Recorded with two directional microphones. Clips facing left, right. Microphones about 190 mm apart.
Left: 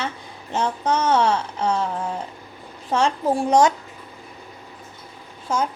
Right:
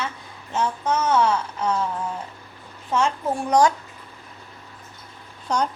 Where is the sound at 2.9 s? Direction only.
35° left (ahead or behind).